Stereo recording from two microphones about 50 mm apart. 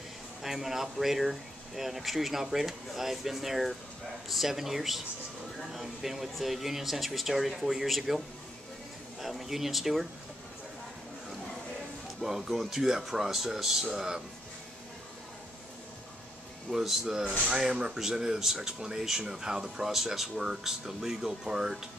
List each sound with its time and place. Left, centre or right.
0.4 s speech: centre
9.2 s speech: centre
12.2 s speech: centre
16.7 s speech: centre